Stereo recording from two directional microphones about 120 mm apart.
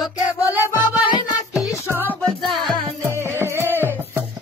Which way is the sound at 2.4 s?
Centre (ahead or behind).